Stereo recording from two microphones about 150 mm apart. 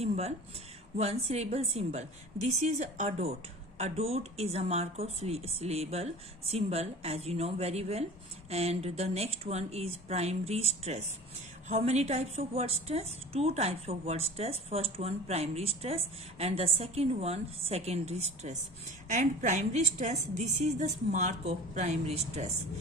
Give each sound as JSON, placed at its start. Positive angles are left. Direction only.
{"t": 0.0, "sound": "a woman's voice", "side_deg": -45}
{"t": 11.7, "sound": "a woman's voice", "side_deg": -45}